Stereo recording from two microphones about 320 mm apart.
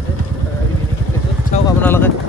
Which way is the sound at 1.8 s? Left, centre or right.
Centre.